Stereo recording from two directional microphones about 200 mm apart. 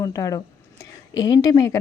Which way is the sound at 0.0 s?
20° left (ahead or behind).